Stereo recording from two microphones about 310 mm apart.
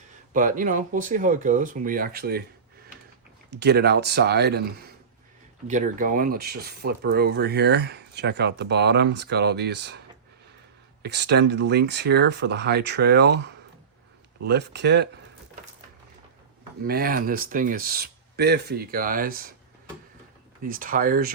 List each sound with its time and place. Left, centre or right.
0.3 s speech: right
3.5 s speech: right
11.0 s speech: right
16.8 s speech: right
20.7 s speech: right